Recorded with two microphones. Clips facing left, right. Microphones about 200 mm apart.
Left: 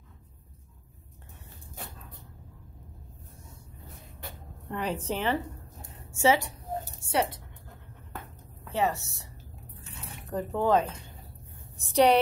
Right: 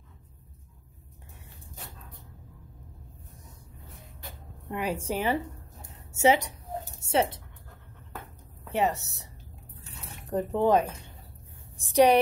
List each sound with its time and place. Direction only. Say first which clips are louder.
4.6 s a woman's voice: right 1 dB; 10° right (ahead or behind)
7.0 s a sound: right 3 dB; 25° right (ahead or behind)
8.6 s a woman's voice: right 1 dB; 20° right (ahead or behind)
10.3 s a woman's voice: right 2 dB; 20° right (ahead or behind)